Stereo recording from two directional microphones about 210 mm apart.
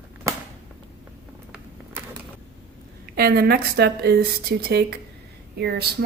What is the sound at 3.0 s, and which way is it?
A woman's voice, 45° right (ahead or behind).